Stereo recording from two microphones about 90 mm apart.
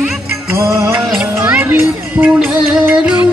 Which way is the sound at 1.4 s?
20° right (ahead or behind).